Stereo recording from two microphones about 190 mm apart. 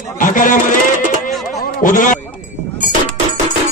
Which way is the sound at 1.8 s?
45° left (ahead or behind).